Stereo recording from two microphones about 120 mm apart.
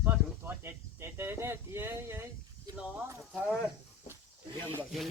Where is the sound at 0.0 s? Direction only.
20° right (ahead or behind).